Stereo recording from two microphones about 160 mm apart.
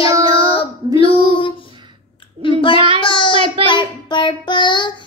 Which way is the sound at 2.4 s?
35° left (ahead or behind).